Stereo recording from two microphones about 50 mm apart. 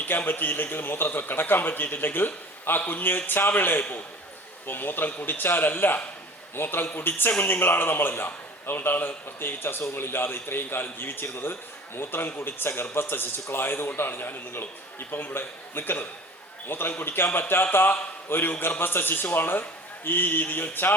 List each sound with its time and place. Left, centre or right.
0.0 s a man's voice: left